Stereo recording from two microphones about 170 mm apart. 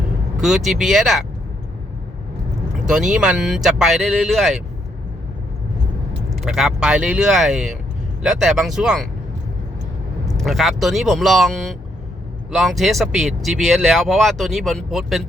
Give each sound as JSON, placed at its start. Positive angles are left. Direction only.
{"t": 0.4, "sound": "speech", "side_deg": 0}
{"t": 2.8, "sound": "speech", "side_deg": 0}
{"t": 6.3, "sound": "speech", "side_deg": 0}
{"t": 10.3, "sound": "speech", "side_deg": 0}